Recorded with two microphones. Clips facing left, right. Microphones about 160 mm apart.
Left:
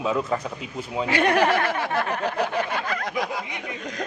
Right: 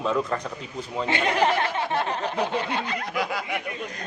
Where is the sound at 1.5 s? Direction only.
20° right (ahead or behind).